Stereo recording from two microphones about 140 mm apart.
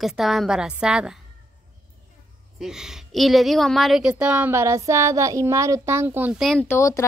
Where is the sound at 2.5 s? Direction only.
5° right (ahead or behind).